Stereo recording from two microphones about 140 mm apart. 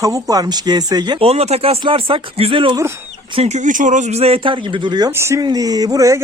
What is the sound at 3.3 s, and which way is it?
Speech, 55° right (ahead or behind).